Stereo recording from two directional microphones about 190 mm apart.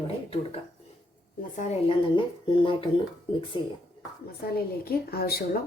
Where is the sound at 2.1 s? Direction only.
25° left (ahead or behind).